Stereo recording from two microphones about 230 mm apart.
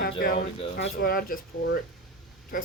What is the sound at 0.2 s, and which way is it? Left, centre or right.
Speech, left.